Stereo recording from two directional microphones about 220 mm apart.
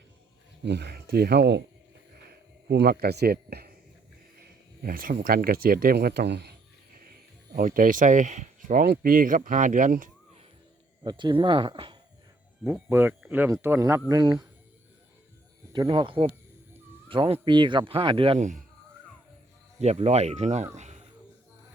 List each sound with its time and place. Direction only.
0.6 s speech: 50° right (ahead or behind)
2.6 s speech: 45° right (ahead or behind)
11.0 s speech: 20° right (ahead or behind)
12.6 s speech: 10° right (ahead or behind)
15.7 s speech: 20° right (ahead or behind)
19.8 s speech: 30° right (ahead or behind)
20.7 s a sound: 30° right (ahead or behind)